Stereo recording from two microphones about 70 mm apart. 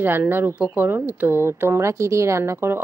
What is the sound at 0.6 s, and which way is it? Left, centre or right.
Speech, centre.